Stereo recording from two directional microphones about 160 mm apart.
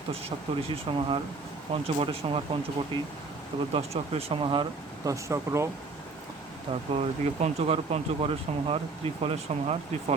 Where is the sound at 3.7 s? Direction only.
40° right (ahead or behind); by 5.7 s 20° right (ahead or behind).